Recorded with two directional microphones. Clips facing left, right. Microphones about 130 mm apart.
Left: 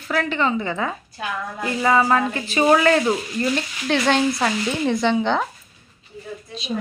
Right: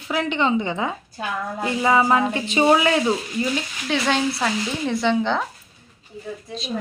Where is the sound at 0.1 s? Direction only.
20° right (ahead or behind).